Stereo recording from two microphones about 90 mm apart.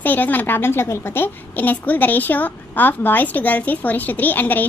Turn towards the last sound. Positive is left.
turn(degrees=20)  # may be behind; listen again after turning